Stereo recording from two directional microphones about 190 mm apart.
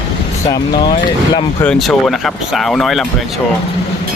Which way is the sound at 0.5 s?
20° left (ahead or behind).